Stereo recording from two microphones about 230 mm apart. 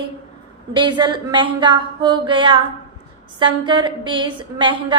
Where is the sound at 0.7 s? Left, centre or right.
Centre.